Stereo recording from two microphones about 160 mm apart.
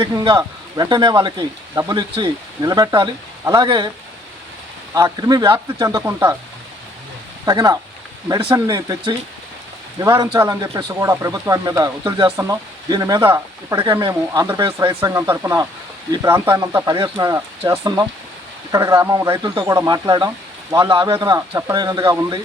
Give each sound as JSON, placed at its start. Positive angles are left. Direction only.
{"t": 0.0, "sound": "speech", "side_deg": -25}
{"t": 4.9, "sound": "speech", "side_deg": -20}
{"t": 7.4, "sound": "speech", "side_deg": -25}
{"t": 16.9, "sound": "speech", "side_deg": -30}
{"t": 17.3, "sound": "speech", "side_deg": -20}